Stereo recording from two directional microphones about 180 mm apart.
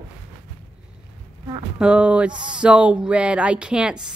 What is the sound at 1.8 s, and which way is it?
Speech, 5° right (ahead or behind).